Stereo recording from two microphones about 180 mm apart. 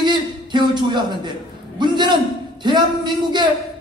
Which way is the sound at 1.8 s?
25° right (ahead or behind).